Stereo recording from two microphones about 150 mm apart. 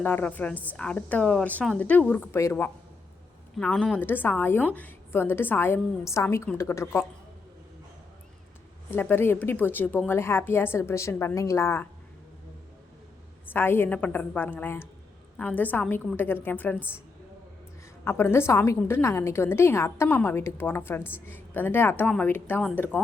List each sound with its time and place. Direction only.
0.0 s a woman's voice: 10° left (ahead or behind)
8.9 s a woman's voice: 15° left (ahead or behind)
13.4 s a woman's voice: 15° left (ahead or behind)
18.0 s a woman's voice: 15° left (ahead or behind)